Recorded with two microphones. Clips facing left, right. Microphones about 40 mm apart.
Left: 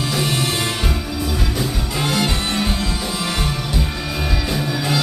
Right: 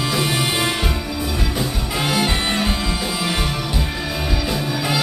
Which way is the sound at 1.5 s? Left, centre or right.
Centre.